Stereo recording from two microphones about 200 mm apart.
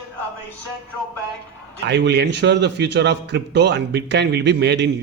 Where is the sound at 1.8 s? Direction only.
60° right (ahead or behind).